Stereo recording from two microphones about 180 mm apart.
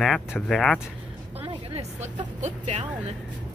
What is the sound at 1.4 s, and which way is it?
Vehicle, 40° right (ahead or behind).